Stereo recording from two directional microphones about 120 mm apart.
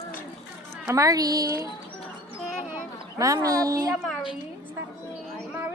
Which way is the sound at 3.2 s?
30° right (ahead or behind).